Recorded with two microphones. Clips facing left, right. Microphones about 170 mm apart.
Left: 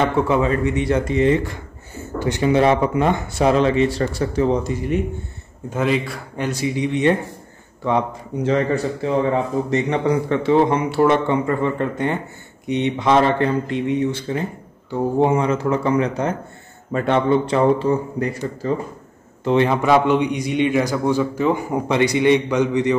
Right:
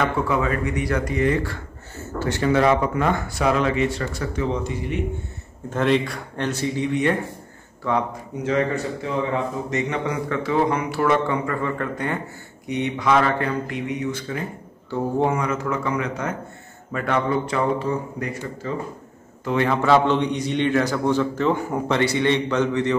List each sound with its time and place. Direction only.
0.0 s speech: 25° left (ahead or behind); by 4.9 s 40° left (ahead or behind)
5.7 s a man's voice: 5° left (ahead or behind); by 7.2 s 20° left (ahead or behind)
8.5 s speech: 35° left (ahead or behind)
14.9 s speech: 15° left (ahead or behind); by 18.8 s 35° left (ahead or behind)
19.4 s a man's voice: 20° left (ahead or behind)